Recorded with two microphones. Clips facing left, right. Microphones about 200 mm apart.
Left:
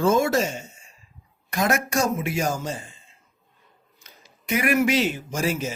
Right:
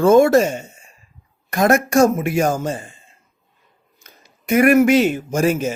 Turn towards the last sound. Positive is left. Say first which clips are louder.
# right 8 dB
turn(degrees=-50)  # may be behind; listen again after turning